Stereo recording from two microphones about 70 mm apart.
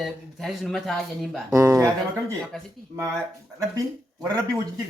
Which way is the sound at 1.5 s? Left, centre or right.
Right.